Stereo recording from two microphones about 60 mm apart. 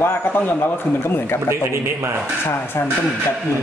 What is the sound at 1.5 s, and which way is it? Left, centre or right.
Speech, right.